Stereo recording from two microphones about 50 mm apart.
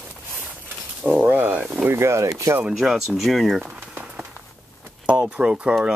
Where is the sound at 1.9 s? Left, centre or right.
Right.